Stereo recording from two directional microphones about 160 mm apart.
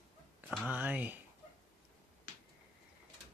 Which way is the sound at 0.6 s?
10° right (ahead or behind).